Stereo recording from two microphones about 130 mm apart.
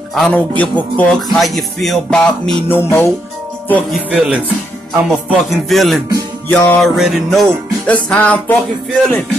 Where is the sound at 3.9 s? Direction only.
10° right (ahead or behind).